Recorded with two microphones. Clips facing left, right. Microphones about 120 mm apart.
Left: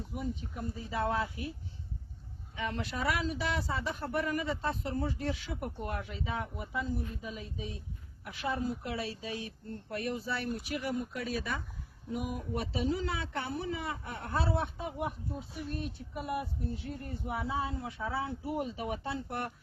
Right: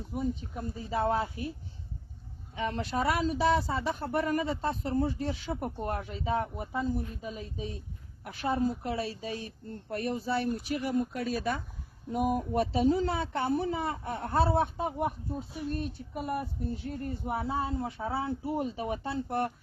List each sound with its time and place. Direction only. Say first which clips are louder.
0.1 s speech: right 6 dB; 30° right (ahead or behind)
2.6 s speech: right 5 dB; 35° right (ahead or behind)